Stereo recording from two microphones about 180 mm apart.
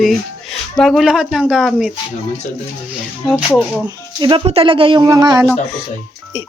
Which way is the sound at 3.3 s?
10° left (ahead or behind).